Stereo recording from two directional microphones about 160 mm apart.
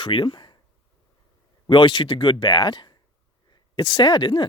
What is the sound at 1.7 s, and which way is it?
Speech, 30° left (ahead or behind).